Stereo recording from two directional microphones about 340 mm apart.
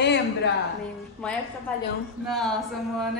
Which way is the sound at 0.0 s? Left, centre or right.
Left.